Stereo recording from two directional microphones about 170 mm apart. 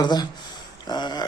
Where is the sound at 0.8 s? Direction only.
25° left (ahead or behind).